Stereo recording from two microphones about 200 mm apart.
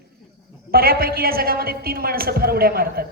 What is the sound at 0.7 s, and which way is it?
A woman's voice, 50° right (ahead or behind).